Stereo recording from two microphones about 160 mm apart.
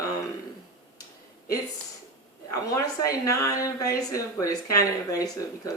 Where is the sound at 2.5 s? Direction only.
20° left (ahead or behind).